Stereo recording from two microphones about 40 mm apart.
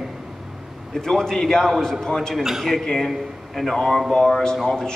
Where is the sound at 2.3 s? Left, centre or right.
Centre.